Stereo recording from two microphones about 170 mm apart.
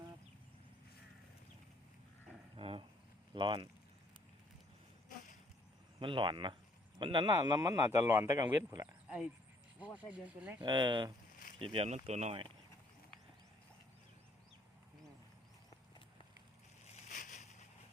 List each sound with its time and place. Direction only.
2.6 s roaring cats: 30° right (ahead or behind)
3.3 s speech: 30° right (ahead or behind)
5.0 s a sound: 50° left (ahead or behind)
6.0 s speech: 30° right (ahead or behind)
9.0 s speech: 5° right (ahead or behind)
10.6 s speech: 25° right (ahead or behind)
16.8 s a sound: 45° left (ahead or behind)